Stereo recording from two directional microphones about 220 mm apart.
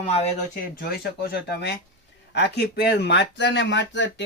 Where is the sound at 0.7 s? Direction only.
45° left (ahead or behind).